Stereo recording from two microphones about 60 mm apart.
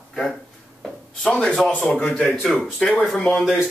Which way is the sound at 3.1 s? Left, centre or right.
Centre.